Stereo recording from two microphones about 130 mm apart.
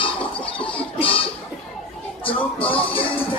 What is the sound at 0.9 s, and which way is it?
Cough, 45° left (ahead or behind).